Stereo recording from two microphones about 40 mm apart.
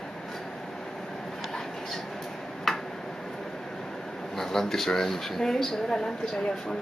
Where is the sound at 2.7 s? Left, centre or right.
Centre.